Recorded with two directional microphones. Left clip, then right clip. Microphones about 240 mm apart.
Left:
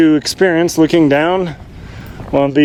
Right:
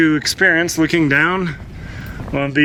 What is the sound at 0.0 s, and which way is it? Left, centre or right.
Speech, centre.